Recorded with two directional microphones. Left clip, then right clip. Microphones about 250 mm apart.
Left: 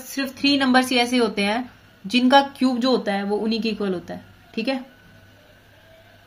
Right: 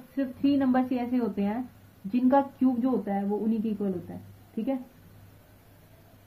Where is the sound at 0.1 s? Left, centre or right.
Centre.